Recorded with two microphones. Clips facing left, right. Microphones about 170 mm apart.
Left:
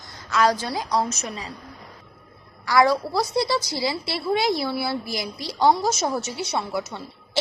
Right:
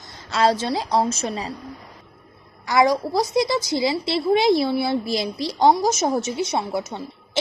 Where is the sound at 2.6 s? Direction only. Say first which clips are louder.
Right 1 dB; 20° right (ahead or behind).